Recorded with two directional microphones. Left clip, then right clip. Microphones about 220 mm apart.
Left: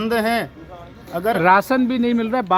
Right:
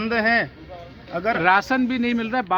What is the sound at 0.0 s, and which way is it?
Speech, 5° left (ahead or behind).